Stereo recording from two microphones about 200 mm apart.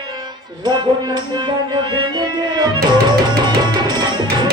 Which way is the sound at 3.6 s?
20° right (ahead or behind).